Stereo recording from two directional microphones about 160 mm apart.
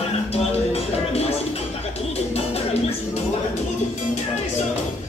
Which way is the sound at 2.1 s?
40° left (ahead or behind).